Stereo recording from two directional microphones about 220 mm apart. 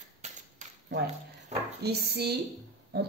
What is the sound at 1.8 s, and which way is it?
A woman's voice, 45° right (ahead or behind).